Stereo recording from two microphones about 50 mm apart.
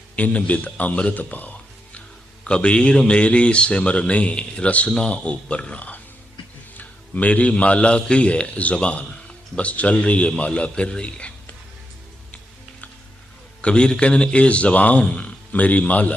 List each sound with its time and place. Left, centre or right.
0.2 s speech: left
2.4 s a man's voice: left
13.6 s a man's voice: centre